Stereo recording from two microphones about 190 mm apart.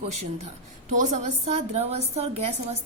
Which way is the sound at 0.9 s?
40° right (ahead or behind).